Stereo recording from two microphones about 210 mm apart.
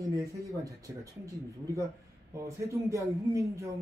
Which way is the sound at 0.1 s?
15° right (ahead or behind).